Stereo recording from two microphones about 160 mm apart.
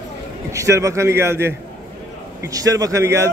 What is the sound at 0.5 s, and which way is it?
A man's voice, 20° right (ahead or behind).